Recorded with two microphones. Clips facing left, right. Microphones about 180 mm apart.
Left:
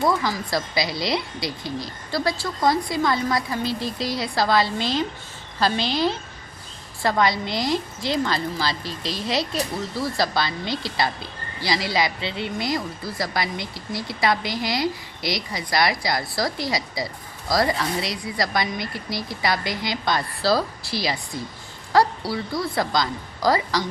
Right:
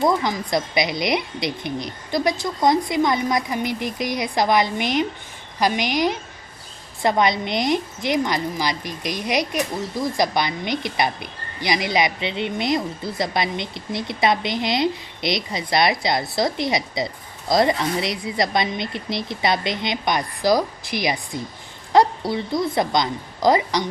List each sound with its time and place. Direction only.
0.0 s a woman's voice: 20° right (ahead or behind)